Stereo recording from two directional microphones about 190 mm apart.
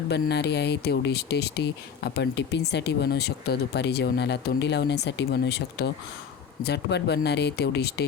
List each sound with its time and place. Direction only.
0.1 s speech: 60° left (ahead or behind)